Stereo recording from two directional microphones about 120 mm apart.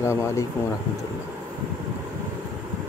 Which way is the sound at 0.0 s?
25° left (ahead or behind).